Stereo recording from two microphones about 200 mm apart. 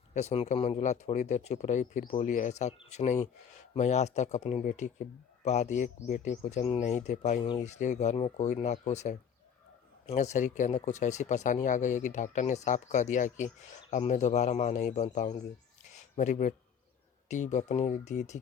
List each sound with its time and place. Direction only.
0.1 s speech: 35° left (ahead or behind)